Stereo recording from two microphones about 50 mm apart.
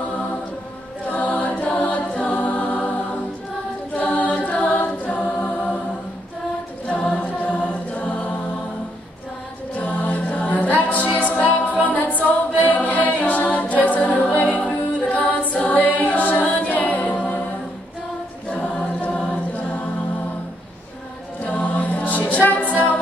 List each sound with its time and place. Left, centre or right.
1.0 s music: left
3.9 s a capella: left
6.9 s choir: left
9.8 s a capella: left
18.5 s choir: left
21.5 s choir: left
22.3 s music: left